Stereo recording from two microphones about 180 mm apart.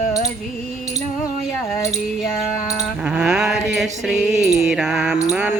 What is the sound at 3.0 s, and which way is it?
Mantra, 5° right (ahead or behind).